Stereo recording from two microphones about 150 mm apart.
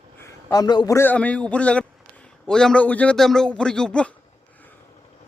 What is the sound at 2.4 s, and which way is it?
Speech, 5° left (ahead or behind).